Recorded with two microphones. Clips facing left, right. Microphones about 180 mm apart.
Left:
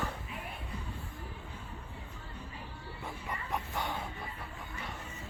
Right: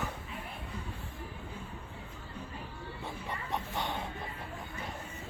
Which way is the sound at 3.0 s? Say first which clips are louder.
Even; 25° right (ahead or behind).